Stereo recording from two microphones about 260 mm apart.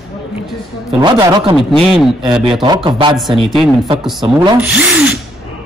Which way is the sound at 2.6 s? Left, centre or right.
Centre.